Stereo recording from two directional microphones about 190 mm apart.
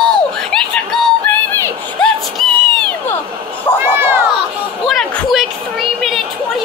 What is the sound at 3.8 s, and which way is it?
Children playing, 10° right (ahead or behind).